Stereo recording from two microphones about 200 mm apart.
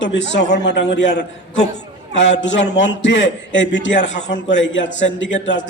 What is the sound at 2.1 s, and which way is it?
A man's voice, 65° left (ahead or behind).